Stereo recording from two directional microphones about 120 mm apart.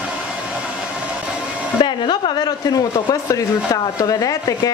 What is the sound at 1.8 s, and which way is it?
A woman's voice, 40° left (ahead or behind).